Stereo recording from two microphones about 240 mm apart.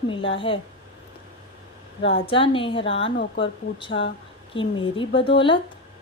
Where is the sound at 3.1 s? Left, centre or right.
Left.